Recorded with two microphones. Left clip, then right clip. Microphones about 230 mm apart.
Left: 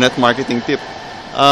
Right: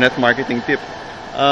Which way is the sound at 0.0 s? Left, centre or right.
Left.